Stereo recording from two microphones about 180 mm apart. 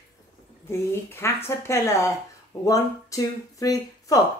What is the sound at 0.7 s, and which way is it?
A woman's voice, 15° left (ahead or behind).